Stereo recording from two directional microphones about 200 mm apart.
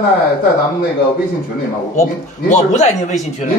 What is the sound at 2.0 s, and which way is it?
Speech, 35° left (ahead or behind).